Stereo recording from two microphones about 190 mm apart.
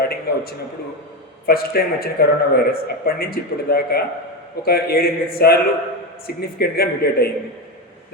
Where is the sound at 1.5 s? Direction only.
55° left (ahead or behind).